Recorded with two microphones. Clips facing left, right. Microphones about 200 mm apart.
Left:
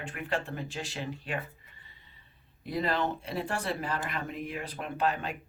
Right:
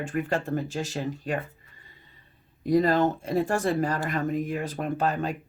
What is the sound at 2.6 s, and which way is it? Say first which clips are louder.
Speech: right 9 dB; 45° right (ahead or behind).